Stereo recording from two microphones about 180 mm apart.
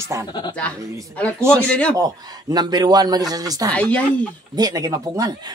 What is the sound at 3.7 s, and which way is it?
Speech, 5° left (ahead or behind).